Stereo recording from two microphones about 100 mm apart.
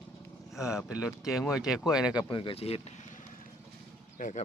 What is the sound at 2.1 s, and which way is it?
Speech, 55° left (ahead or behind).